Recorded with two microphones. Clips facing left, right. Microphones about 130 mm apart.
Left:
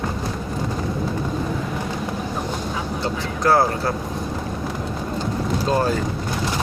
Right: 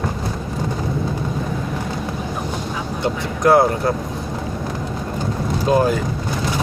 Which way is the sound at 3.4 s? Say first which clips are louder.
Right 4 dB; 20° right (ahead or behind).